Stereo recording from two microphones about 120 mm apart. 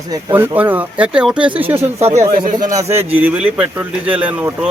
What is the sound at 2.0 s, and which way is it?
Speech, 65° right (ahead or behind).